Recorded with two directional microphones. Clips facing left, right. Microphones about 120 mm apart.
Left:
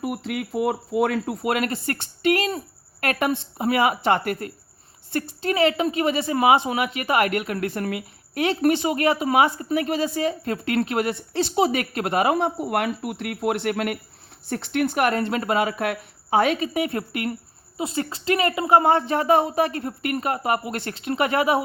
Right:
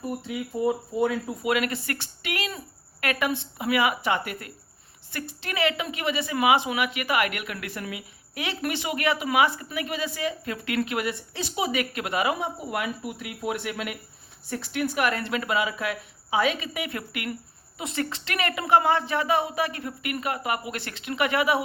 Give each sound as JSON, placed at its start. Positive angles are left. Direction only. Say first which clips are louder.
{"t": 0.0, "sound": "speech", "louder": "left 4 dB", "side_deg": 85}
{"t": 1.5, "sound": "a woman's voice", "louder": "left 1 dB", "side_deg": 45}
{"t": 4.0, "sound": "a woman's voice", "louder": "left 6 dB", "side_deg": 55}
{"t": 9.8, "sound": "a woman's voice", "louder": "left 3 dB", "side_deg": 50}
{"t": 18.9, "sound": "a woman's voice", "louder": "left 5 dB", "side_deg": 45}